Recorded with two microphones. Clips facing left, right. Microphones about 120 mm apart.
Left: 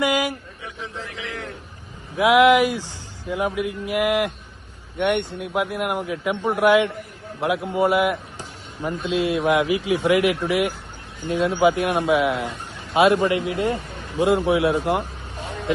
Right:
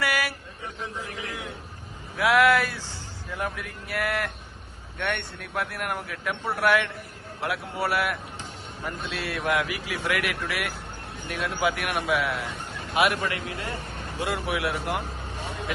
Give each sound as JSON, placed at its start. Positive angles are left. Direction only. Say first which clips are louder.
{"t": 0.0, "sound": "vehicle", "louder": "left 6 dB", "side_deg": 20}
{"t": 1.0, "sound": "a sound", "louder": "left 2 dB", "side_deg": -40}
{"t": 2.1, "sound": "a man's voice", "louder": "left 6 dB", "side_deg": 20}